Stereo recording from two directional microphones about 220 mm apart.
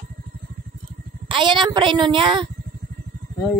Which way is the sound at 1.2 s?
20° right (ahead or behind).